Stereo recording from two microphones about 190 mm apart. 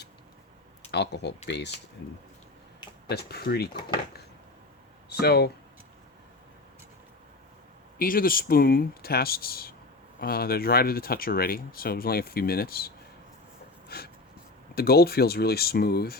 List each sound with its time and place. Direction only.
0.9 s speech: 60° left (ahead or behind)
3.1 s speech: 55° left (ahead or behind)
5.1 s speech: 55° left (ahead or behind)
7.9 s speech: 50° left (ahead or behind)
13.8 s a sound: 55° left (ahead or behind)
14.8 s speech: 55° left (ahead or behind)